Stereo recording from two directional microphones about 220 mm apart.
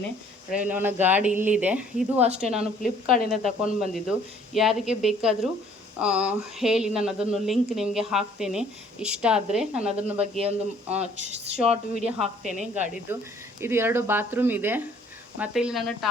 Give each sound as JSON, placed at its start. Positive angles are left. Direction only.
{"t": 0.5, "sound": "speech", "side_deg": -5}
{"t": 11.0, "sound": "speech", "side_deg": -30}
{"t": 11.7, "sound": "speech", "side_deg": -5}